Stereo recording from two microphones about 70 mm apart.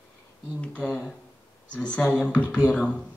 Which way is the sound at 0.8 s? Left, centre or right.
Centre.